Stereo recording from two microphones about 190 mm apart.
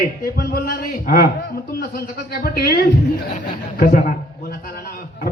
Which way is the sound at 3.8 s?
45° left (ahead or behind).